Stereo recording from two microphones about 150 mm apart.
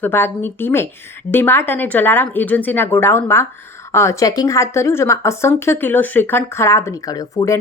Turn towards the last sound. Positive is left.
turn(degrees=25)  # may be behind; listen again after turning